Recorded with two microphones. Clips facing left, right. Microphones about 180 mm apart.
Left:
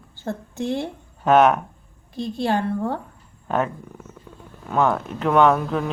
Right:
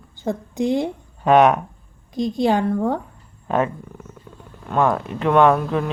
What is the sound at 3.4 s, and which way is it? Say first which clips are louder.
Speech: right 2 dB; centre (ahead or behind).